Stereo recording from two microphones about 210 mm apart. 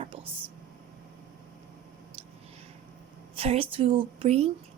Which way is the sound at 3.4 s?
25° right (ahead or behind).